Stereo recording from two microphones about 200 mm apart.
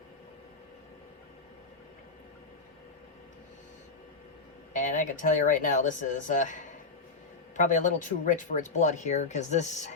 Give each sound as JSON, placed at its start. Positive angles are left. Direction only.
{"t": 4.7, "sound": "speech", "side_deg": 40}